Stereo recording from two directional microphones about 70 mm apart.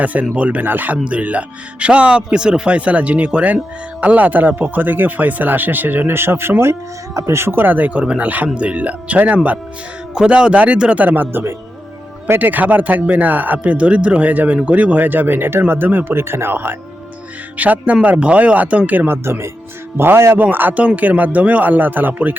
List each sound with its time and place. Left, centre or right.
0.0 s speech: right
17.6 s speech: right